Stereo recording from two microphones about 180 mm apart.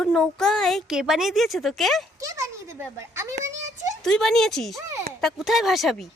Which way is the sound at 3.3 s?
90° right.